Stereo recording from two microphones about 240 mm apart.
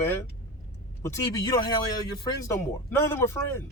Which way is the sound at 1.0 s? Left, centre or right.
Centre.